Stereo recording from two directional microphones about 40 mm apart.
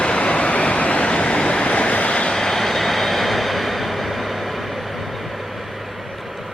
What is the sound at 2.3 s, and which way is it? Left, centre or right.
Vehicle, centre.